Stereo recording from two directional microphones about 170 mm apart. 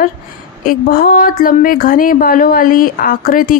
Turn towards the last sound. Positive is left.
turn(degrees=55)  # may be behind; listen again after turning